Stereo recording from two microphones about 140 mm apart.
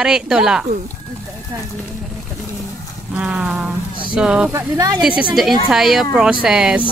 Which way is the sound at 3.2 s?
5° right (ahead or behind).